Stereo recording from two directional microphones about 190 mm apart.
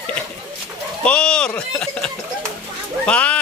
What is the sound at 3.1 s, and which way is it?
Speech, 5° left (ahead or behind).